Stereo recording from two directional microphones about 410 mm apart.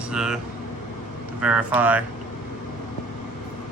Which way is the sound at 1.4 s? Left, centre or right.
Centre.